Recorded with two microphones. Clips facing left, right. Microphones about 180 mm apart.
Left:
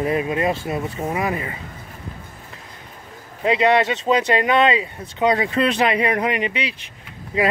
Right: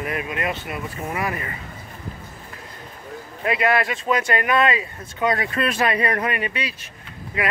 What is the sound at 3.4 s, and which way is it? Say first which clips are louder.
Speech: left 4 dB; 20° left (ahead or behind).